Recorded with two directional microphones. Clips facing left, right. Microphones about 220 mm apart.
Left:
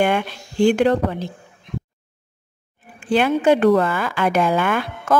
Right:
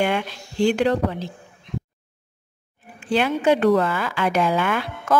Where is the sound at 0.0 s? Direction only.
50° left (ahead or behind).